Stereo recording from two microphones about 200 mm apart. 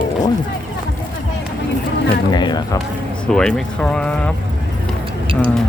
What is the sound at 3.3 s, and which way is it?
Speech, 5° left (ahead or behind).